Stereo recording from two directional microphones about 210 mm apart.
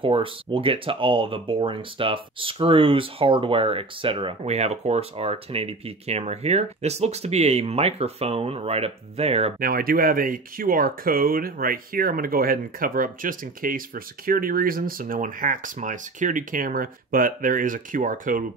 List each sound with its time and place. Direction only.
0.0 s speech: 25° right (ahead or behind)
9.6 s speech: 45° right (ahead or behind)